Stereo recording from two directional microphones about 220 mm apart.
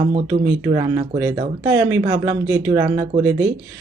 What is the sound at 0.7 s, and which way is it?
Speech, 20° right (ahead or behind).